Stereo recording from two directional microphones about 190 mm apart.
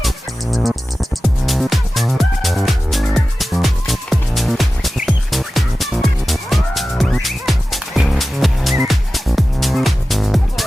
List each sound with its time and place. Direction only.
0.5 s music: centre (ahead or behind)